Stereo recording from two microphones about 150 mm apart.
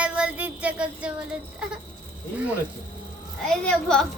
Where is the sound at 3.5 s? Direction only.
5° left (ahead or behind).